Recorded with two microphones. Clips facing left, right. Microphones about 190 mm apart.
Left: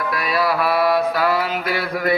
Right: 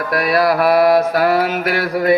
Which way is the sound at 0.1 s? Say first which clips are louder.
Right 7 dB; 45° right (ahead or behind).